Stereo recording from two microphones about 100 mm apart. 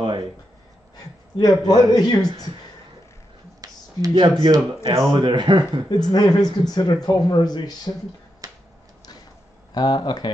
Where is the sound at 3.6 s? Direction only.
35° right (ahead or behind).